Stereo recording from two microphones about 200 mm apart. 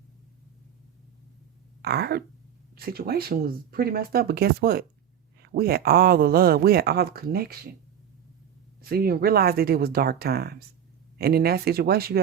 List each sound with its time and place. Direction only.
1.8 s speech: 50° right (ahead or behind)
8.8 s speech: 50° right (ahead or behind)